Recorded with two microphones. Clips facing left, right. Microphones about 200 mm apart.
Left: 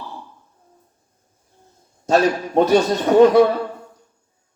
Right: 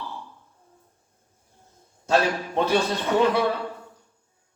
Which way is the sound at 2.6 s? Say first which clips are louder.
Left 8 dB; 40° left (ahead or behind).